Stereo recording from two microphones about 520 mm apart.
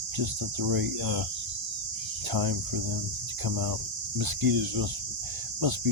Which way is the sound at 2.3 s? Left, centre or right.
Right.